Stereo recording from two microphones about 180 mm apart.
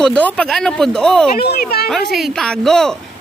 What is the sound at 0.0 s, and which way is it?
Speech, 5° left (ahead or behind).